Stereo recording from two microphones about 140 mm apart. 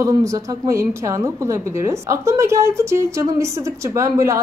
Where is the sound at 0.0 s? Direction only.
25° right (ahead or behind).